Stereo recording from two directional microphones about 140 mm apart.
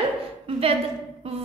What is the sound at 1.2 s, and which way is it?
Music, 45° right (ahead or behind).